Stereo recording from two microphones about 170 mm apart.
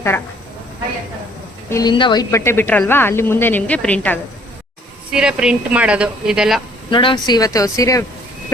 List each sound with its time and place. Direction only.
1.7 s speech: 25° left (ahead or behind)
2.3 s speech: 15° left (ahead or behind)
5.1 s a woman's voice: 5° right (ahead or behind)
6.9 s speech: 30° left (ahead or behind)